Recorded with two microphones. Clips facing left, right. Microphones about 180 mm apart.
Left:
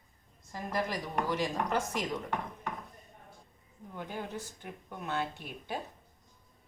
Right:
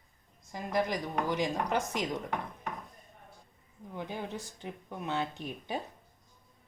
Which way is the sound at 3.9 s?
15° right (ahead or behind).